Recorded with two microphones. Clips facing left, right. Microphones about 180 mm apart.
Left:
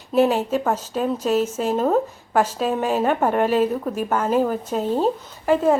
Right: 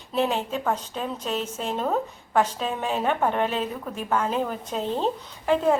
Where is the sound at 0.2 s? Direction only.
5° left (ahead or behind).